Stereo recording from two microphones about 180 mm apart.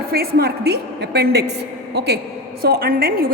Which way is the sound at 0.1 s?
60° right (ahead or behind).